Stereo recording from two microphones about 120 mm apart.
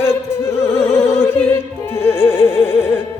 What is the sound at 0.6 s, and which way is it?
Music, 25° left (ahead or behind).